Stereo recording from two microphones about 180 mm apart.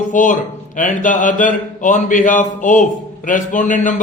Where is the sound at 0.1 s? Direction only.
45° left (ahead or behind).